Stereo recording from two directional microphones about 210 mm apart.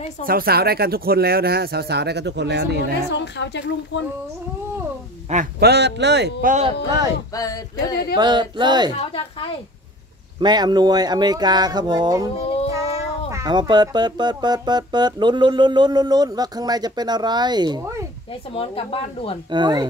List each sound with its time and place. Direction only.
0.2 s speech: 45° right (ahead or behind)
3.1 s a woman's voice: 55° left (ahead or behind)
5.3 s speech: 45° right (ahead or behind)
7.3 s a sound: 15° left (ahead or behind)
8.2 s speech: 20° right (ahead or behind)
9.1 s speech: 25° left (ahead or behind)
10.4 s speech: 20° right (ahead or behind)
12.4 s child singing: 30° left (ahead or behind)
13.3 s speech: 20° right (ahead or behind)
18.5 s speech: 25° left (ahead or behind)
19.5 s speech: 20° right (ahead or behind)